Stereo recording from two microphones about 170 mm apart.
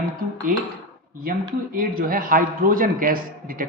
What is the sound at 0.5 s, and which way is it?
A man's voice, 55° right (ahead or behind).